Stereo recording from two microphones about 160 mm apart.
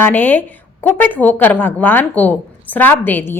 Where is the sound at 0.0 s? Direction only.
10° left (ahead or behind).